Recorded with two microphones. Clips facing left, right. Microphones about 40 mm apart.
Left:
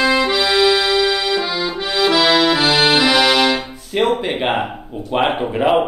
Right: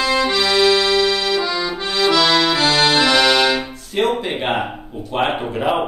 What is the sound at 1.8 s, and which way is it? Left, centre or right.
Accordion, centre.